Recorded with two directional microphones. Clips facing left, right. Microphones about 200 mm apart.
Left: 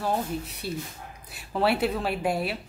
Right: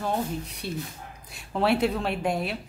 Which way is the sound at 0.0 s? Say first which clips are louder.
Even; centre (ahead or behind).